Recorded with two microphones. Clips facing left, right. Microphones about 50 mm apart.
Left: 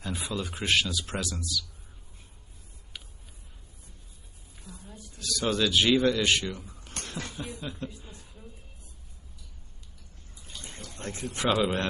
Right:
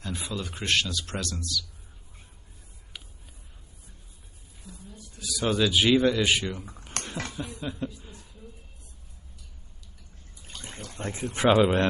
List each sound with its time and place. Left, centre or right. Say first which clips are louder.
0.0 s speech: left 1 dB; centre
4.7 s a sound: even; centre
5.2 s speech: right 2 dB; centre
7.0 s a sound: right 4 dB; right
7.3 s speech: right 3 dB; centre
11.0 s speech: right 5 dB; right